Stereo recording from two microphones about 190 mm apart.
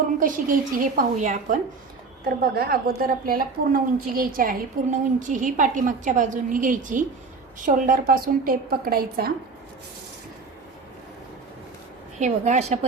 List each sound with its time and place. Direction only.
0.2 s a woman's voice: 45° right (ahead or behind)
2.2 s a woman's voice: 55° right (ahead or behind)
12.2 s a woman's voice: 35° right (ahead or behind)